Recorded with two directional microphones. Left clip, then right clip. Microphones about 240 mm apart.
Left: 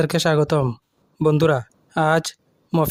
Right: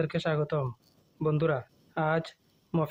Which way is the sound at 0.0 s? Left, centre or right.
Left.